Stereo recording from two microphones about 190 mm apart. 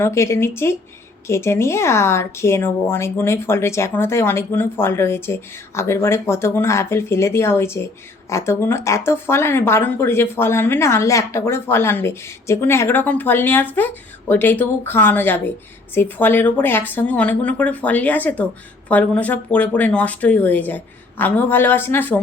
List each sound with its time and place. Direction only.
0.0 s speech: 15° left (ahead or behind)